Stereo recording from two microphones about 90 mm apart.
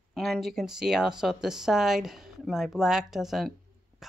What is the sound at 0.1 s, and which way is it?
Speech, centre (ahead or behind).